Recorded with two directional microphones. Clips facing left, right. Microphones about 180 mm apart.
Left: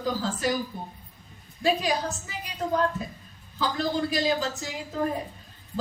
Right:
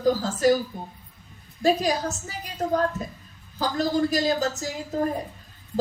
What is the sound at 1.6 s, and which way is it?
A woman's voice, 40° right (ahead or behind).